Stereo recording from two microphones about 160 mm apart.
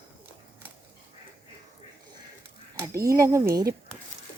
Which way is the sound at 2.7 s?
20° right (ahead or behind).